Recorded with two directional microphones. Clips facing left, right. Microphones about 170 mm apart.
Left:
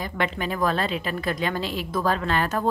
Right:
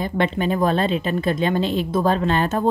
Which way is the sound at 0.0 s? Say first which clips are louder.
Right 6 dB; 25° right (ahead or behind).